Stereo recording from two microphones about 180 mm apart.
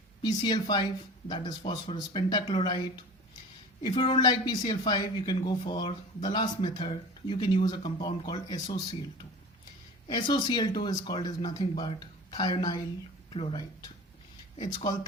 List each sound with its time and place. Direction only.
0.2 s speech: 25° left (ahead or behind)